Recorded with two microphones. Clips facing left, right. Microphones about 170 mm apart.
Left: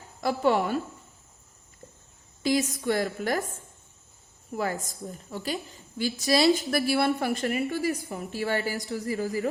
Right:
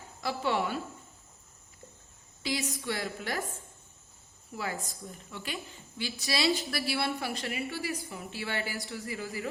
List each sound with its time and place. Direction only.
0.2 s a woman's voice: 45° left (ahead or behind)
2.4 s a woman's voice: 45° left (ahead or behind)
4.5 s a woman's voice: 45° left (ahead or behind)